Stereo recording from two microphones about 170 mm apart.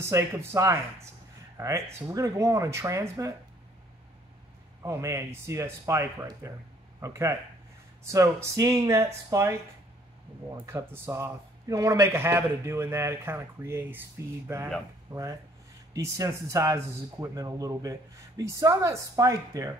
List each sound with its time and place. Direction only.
0.0 s a man's voice: 15° right (ahead or behind)
4.8 s a man's voice: 15° right (ahead or behind)
10.6 s a man's voice: 15° right (ahead or behind)
15.1 s speech: 30° right (ahead or behind)
15.9 s speech: 20° right (ahead or behind)